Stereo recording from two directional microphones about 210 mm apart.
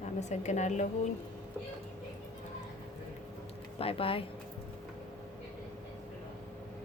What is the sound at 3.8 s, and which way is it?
Speech, 25° left (ahead or behind).